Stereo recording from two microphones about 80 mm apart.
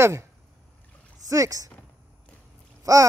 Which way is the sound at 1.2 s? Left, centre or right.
Right.